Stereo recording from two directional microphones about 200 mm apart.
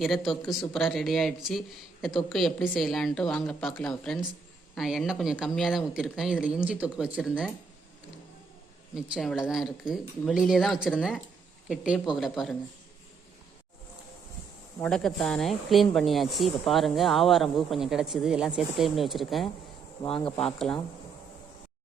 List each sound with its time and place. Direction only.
0.0 s speech: centre (ahead or behind)
9.0 s speech: 5° right (ahead or behind)
14.8 s speech: 5° left (ahead or behind)
20.1 s speech: 25° left (ahead or behind)
20.3 s speech: centre (ahead or behind)